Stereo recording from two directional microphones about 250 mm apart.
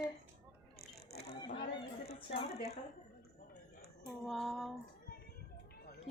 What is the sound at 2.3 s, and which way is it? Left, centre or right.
Speech, left.